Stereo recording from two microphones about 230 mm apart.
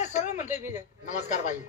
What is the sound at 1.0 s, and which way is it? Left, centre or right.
Speech, left.